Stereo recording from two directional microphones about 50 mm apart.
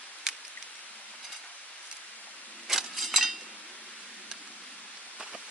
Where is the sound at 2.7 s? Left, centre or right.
Centre.